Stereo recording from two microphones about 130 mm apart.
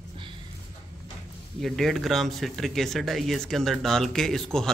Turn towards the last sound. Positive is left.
turn(degrees=5)  # may be behind; listen again after turning